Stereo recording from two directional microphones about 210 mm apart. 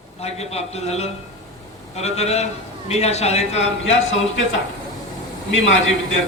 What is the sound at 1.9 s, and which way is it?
A man's voice, 30° left (ahead or behind).